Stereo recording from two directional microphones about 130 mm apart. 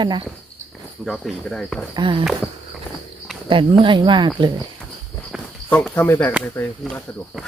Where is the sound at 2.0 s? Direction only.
40° right (ahead or behind).